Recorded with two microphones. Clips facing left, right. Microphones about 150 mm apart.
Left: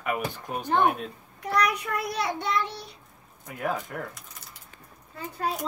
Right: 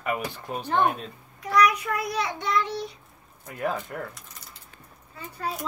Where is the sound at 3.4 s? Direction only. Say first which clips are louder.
Right 1 dB; centre (ahead or behind).